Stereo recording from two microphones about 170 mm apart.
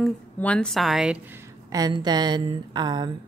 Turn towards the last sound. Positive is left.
turn(degrees=-25)  # may be behind; listen again after turning